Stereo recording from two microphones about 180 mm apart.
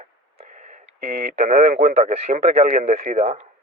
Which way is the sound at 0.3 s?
40° right (ahead or behind).